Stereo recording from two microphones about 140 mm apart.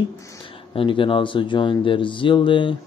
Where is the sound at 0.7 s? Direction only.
40° left (ahead or behind).